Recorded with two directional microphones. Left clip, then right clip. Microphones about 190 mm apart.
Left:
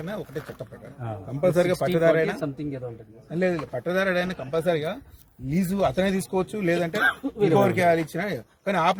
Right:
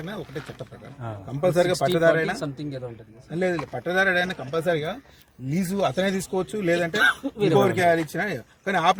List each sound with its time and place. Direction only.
0.0 s speech: centre (ahead or behind)
1.4 s speech: centre (ahead or behind)
3.3 s speech: centre (ahead or behind)
7.0 s speech: 25° left (ahead or behind)
7.6 s speech: 10° right (ahead or behind)